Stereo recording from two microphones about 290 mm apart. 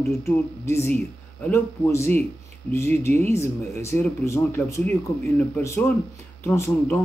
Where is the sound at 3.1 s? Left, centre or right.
Right.